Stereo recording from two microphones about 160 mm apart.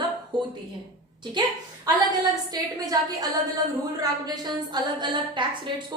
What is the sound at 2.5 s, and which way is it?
A woman's voice, 25° right (ahead or behind).